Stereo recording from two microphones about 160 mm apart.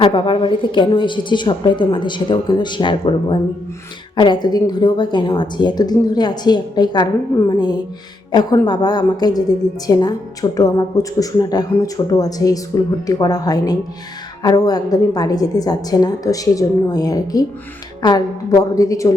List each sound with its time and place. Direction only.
0.0 s a woman's voice: 30° left (ahead or behind)